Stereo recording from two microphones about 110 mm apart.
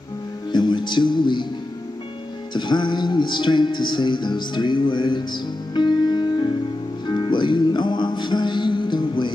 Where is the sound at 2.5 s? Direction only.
45° left (ahead or behind).